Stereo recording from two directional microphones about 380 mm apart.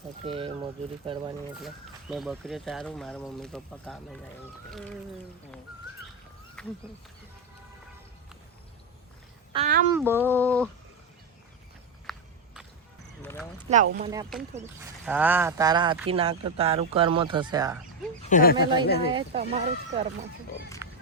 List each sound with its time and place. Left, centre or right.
0.3 s speech: centre
1.5 s speech: centre
6.6 s a sound: centre
9.5 s a child's voice: centre
10.0 s speech: centre
12.1 s walk: centre
13.2 s a sound: centre
14.0 s speech: centre
18.2 s speech: centre
19.1 s speech: centre
20.8 s run: centre